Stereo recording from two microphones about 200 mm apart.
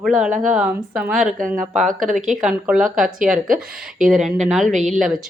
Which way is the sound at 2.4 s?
5° right (ahead or behind).